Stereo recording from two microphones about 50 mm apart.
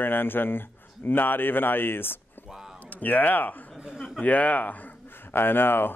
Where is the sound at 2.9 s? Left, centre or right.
Left.